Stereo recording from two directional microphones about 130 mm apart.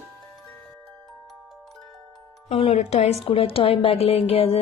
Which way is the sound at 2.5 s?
50° left (ahead or behind).